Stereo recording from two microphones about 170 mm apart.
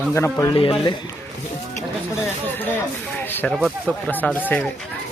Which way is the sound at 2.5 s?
10° left (ahead or behind).